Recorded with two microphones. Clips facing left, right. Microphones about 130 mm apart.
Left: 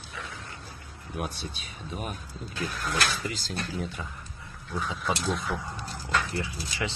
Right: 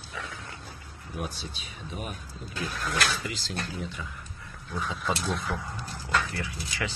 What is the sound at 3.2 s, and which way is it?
Speech, 45° left (ahead or behind).